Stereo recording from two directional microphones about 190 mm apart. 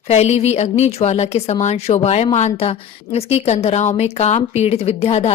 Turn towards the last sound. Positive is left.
turn(degrees=35)  # may be behind; listen again after turning